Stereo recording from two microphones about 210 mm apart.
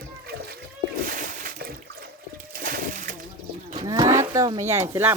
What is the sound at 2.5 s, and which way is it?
Splash, 40° right (ahead or behind).